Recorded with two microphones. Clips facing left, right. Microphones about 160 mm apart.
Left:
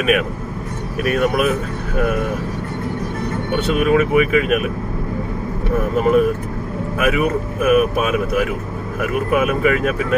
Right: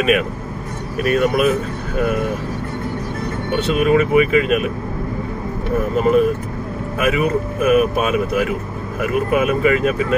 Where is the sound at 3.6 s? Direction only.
25° right (ahead or behind).